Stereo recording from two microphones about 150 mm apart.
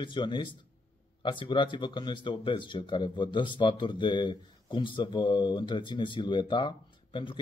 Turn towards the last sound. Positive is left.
turn(degrees=35)  # may be behind; listen again after turning